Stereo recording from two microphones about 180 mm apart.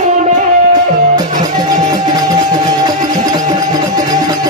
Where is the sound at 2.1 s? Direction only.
25° right (ahead or behind).